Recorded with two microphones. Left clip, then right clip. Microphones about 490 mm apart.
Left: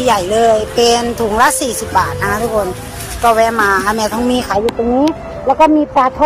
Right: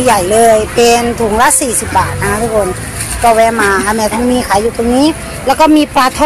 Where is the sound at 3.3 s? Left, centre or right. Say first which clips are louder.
Right 2 dB; left.